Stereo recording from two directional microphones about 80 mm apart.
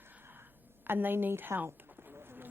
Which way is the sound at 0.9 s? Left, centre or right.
Right.